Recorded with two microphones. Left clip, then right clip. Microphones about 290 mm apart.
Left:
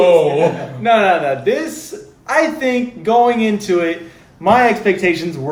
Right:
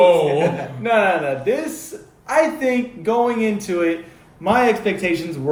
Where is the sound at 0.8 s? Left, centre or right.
Centre.